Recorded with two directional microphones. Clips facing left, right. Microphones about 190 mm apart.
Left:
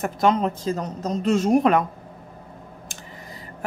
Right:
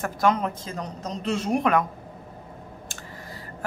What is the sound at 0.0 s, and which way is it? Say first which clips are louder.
Speech: left 3 dB; 25° left (ahead or behind).